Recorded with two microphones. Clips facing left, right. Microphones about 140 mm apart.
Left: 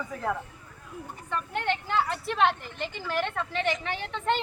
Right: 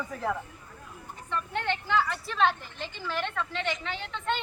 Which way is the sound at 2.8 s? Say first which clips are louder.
Left 3 dB; 55° left (ahead or behind).